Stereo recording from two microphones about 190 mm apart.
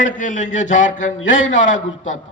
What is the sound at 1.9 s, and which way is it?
Speech, 90° left.